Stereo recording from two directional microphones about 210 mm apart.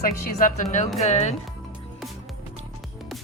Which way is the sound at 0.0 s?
40° left (ahead or behind).